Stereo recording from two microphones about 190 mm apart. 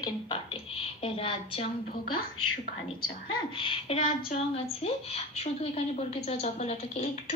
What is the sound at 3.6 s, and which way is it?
A woman's voice, 30° left (ahead or behind).